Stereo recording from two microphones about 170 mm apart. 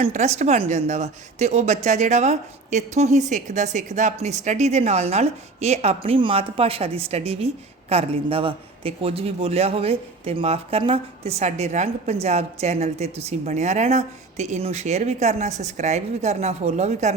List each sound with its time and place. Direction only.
0.0 s speech: 40° right (ahead or behind)